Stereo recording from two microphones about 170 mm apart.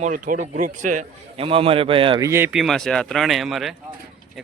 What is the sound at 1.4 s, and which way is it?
Speech, 35° right (ahead or behind).